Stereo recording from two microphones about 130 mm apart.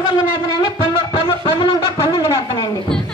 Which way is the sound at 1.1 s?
45° left (ahead or behind).